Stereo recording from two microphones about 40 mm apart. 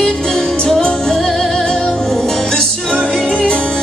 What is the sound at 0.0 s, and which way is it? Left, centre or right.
Music, centre.